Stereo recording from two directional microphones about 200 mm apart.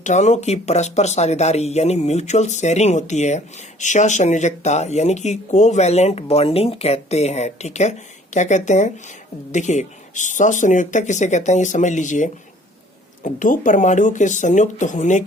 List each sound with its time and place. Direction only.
0.0 s speech: 35° left (ahead or behind)